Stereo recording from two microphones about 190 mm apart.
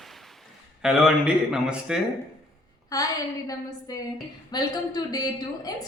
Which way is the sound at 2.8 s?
20° left (ahead or behind).